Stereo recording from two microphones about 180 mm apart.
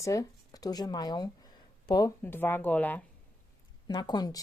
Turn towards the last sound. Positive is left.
turn(degrees=20)  # may be behind; listen again after turning